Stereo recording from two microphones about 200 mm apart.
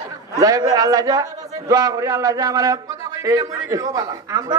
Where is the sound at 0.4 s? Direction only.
15° right (ahead or behind).